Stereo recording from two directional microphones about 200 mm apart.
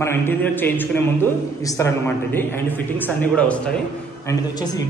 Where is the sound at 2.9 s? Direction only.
10° left (ahead or behind).